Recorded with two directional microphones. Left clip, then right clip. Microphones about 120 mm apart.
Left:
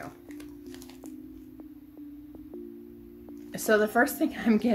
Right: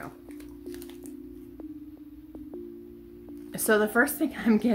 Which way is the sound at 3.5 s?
15° right (ahead or behind).